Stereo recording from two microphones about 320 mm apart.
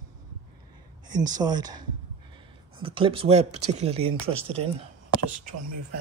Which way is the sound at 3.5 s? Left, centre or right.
Right.